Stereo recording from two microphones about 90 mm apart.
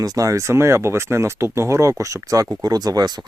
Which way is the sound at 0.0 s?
40° right (ahead or behind).